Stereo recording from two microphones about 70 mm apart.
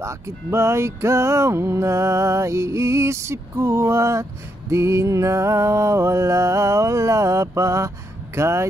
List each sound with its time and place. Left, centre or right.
0.0 s music: right
8.4 s speech: right